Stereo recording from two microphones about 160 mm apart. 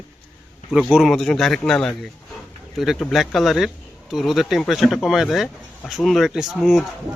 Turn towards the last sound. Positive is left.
turn(degrees=0)  # may be behind; listen again after turning